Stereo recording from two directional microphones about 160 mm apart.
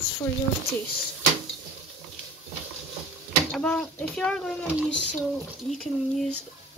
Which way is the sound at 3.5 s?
5° left (ahead or behind).